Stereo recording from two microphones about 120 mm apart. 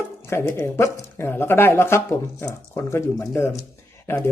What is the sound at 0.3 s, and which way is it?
Speech, 20° left (ahead or behind).